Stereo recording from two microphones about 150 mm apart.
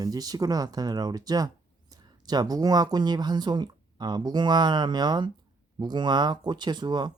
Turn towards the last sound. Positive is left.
turn(degrees=-30)  # may be behind; listen again after turning